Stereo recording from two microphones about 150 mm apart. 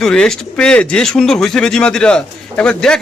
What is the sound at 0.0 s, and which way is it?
A man's voice, 5° left (ahead or behind).